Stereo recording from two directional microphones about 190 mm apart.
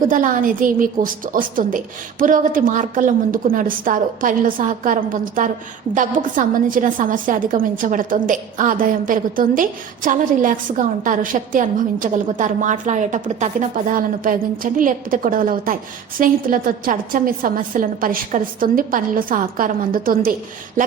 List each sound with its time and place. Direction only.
0.0 s a woman's voice: 45° right (ahead or behind)